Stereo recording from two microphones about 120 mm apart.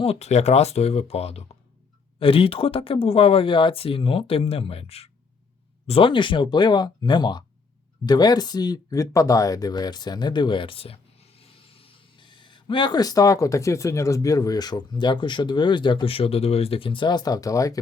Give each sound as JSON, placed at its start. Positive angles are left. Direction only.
{"t": 0.0, "sound": "speech", "side_deg": 60}
{"t": 2.1, "sound": "speech", "side_deg": 50}
{"t": 5.9, "sound": "speech", "side_deg": 45}